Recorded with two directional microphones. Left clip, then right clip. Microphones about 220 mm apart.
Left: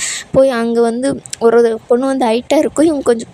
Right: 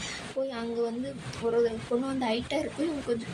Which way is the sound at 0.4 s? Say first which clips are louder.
Left 19 dB; 55° left (ahead or behind).